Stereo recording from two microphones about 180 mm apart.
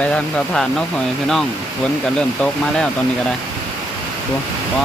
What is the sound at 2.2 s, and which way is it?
Speech, 5° left (ahead or behind).